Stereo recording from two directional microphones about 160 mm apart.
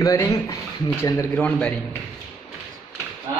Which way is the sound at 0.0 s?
20° left (ahead or behind).